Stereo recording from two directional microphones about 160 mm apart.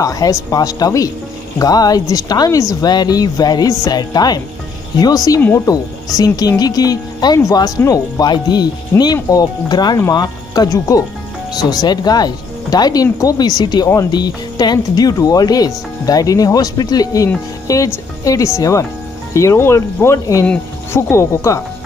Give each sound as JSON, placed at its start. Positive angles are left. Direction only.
{"t": 0.0, "sound": "speech", "side_deg": 20}